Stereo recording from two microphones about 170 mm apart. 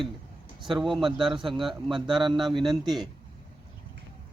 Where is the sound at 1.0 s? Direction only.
30° right (ahead or behind).